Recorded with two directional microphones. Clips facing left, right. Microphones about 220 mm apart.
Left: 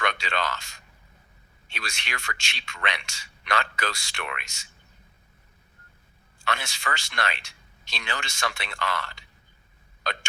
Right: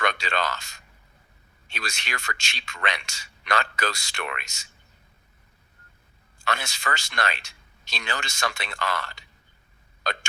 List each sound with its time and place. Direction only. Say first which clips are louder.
0.0 s speech: right 2 dB; 40° right (ahead or behind)
1.7 s a man's voice: right 2 dB; 40° right (ahead or behind)
6.4 s a man's voice: right 1 dB; 40° right (ahead or behind)